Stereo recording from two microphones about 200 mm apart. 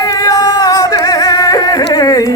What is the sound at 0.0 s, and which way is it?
Music, 20° left (ahead or behind).